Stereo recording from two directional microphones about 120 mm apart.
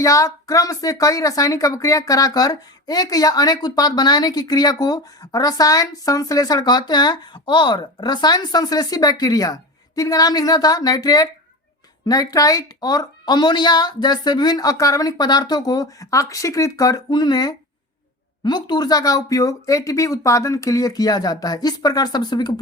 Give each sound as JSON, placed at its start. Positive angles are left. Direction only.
{"t": 0.0, "sound": "speech", "side_deg": 25}